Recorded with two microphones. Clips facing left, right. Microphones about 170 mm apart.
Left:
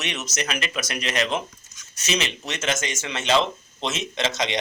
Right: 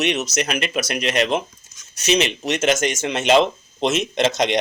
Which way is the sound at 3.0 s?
15° right (ahead or behind).